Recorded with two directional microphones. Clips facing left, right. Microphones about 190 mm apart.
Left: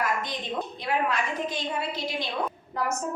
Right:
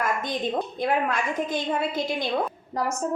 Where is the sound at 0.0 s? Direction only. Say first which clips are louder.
Right 3 dB; 50° right (ahead or behind).